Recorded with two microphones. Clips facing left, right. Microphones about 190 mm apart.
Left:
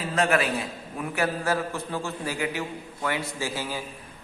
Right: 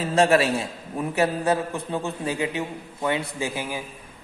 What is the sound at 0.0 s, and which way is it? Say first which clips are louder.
A man's voice: right 5 dB; 30° right (ahead or behind).